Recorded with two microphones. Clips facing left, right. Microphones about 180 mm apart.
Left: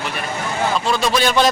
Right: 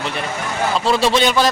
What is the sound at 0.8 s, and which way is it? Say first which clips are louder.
Speech: right 3 dB; 30° right (ahead or behind).